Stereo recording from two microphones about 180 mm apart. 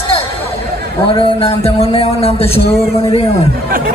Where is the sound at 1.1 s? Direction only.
30° left (ahead or behind).